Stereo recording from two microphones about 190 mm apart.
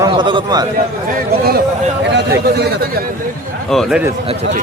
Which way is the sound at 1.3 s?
55° right (ahead or behind).